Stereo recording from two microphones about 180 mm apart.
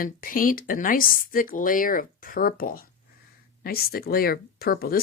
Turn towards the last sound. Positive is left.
turn(degrees=55)  # may be behind; listen again after turning